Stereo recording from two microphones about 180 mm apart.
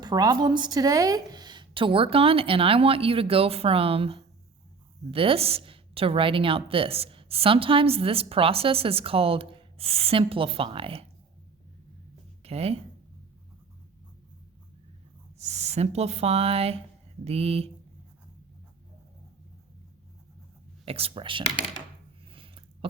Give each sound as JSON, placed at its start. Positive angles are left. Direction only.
{"t": 0.0, "sound": "a woman's voice", "side_deg": -20}
{"t": 12.4, "sound": "speech", "side_deg": -35}
{"t": 15.4, "sound": "a woman's voice", "side_deg": -40}
{"t": 20.8, "sound": "speech", "side_deg": -30}
{"t": 22.3, "sound": "a sound", "side_deg": -30}